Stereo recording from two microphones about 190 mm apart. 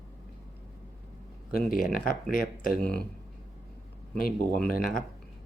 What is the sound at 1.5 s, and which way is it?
Speech, 50° left (ahead or behind).